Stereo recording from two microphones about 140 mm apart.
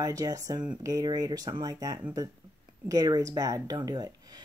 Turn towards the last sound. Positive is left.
turn(degrees=-30)  # may be behind; listen again after turning